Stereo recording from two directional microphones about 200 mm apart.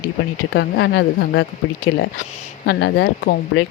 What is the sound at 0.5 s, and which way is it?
Speech, 60° left (ahead or behind).